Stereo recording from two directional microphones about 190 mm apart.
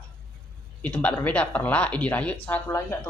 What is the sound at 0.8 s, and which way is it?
A woman's voice, 5° left (ahead or behind).